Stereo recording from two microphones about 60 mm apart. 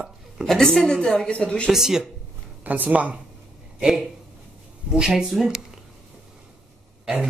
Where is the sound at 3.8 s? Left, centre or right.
Centre.